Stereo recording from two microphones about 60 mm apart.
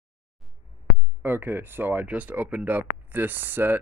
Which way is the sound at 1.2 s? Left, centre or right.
Right.